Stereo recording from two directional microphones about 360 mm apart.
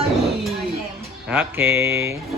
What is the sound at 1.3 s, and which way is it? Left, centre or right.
Speech, centre.